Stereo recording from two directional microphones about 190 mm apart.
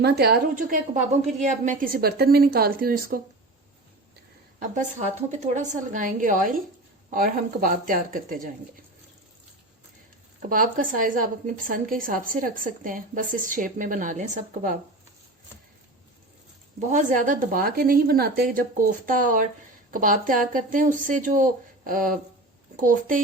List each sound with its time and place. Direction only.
0.0 s a woman's voice: 60° right (ahead or behind)
0.5 s a woman's voice: 40° right (ahead or behind)
4.7 s a woman's voice: 40° right (ahead or behind)
10.5 s a woman's voice: 45° right (ahead or behind)
16.9 s a woman's voice: 45° right (ahead or behind)